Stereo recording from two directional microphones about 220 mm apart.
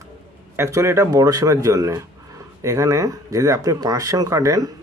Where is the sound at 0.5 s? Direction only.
10° right (ahead or behind).